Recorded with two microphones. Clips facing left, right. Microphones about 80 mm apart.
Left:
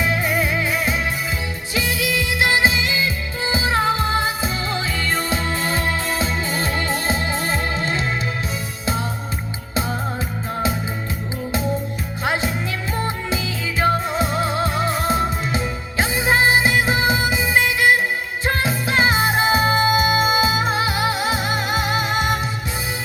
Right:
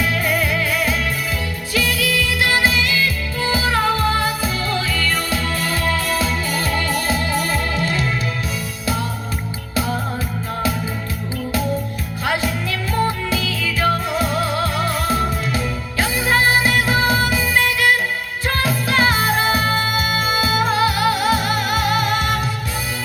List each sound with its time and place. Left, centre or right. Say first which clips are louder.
0.0 s music: right 1 dB; left
9.7 s music: right 2 dB; left
12.2 s music: right 1 dB; left